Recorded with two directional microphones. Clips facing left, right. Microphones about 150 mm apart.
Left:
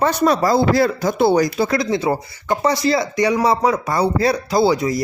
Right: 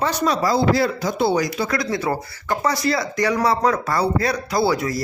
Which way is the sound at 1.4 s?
30° left (ahead or behind).